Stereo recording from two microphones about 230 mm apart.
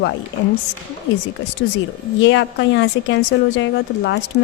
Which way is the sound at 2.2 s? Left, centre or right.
Left.